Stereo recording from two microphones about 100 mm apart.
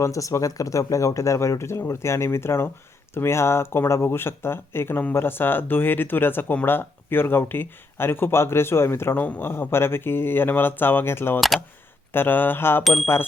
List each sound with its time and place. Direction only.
0.0 s speech: 35° left (ahead or behind)
11.3 s speech: centre (ahead or behind)
12.1 s speech: 20° left (ahead or behind)
12.8 s speech: centre (ahead or behind)